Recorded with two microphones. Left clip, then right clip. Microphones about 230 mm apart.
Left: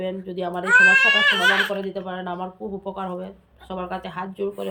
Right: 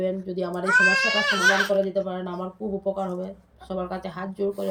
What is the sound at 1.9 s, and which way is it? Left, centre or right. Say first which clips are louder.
Speech: right 2 dB; centre.